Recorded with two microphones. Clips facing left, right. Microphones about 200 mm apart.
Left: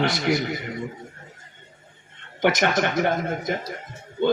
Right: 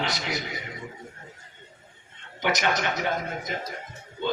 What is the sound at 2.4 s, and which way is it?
A man's voice, 55° left (ahead or behind).